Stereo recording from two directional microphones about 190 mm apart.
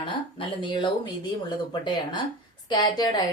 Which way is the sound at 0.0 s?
25° left (ahead or behind).